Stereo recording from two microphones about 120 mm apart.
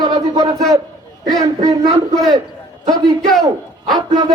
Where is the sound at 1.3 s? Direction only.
35° right (ahead or behind).